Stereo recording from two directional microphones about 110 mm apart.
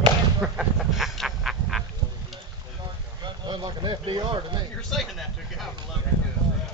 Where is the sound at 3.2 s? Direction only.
40° right (ahead or behind).